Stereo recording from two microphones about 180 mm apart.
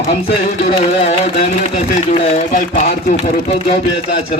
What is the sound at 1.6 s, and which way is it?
Speech, 40° left (ahead or behind).